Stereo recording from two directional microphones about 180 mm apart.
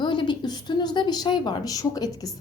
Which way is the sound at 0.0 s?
25° left (ahead or behind).